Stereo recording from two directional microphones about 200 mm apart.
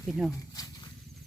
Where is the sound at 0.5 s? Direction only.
20° left (ahead or behind).